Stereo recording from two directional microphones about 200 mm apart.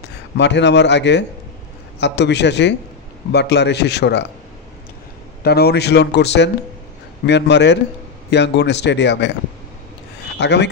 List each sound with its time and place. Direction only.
0.4 s speech: 60° left (ahead or behind)
5.4 s speech: 55° left (ahead or behind)
10.4 s speech: 60° left (ahead or behind)